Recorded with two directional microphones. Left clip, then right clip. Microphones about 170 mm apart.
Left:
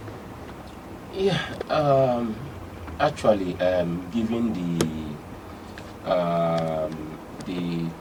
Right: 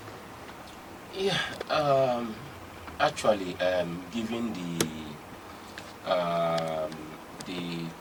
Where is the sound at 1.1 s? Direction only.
10° left (ahead or behind).